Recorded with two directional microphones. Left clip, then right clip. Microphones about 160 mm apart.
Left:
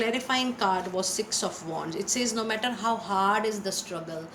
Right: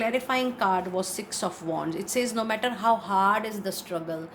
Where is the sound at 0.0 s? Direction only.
50° right (ahead or behind).